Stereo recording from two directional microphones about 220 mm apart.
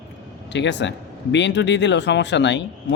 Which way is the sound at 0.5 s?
55° left (ahead or behind).